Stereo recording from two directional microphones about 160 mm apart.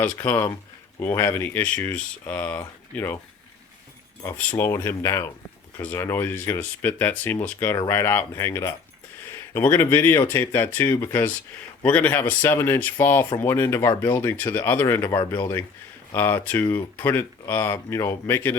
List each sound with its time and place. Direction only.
0.2 s speech: 15° left (ahead or behind)
4.4 s speech: 15° left (ahead or behind)
16.1 s speech: 15° left (ahead or behind)